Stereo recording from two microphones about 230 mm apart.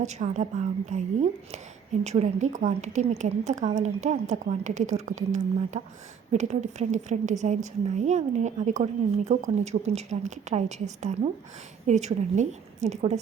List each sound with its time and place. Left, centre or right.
0.0 s a woman's voice: right